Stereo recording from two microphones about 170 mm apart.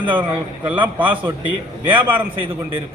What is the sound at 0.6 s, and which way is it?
A man's voice, 10° right (ahead or behind).